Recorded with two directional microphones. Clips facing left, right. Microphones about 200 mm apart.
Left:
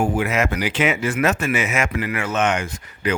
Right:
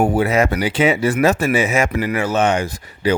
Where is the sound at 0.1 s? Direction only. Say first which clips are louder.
Right 5 dB; 35° right (ahead or behind).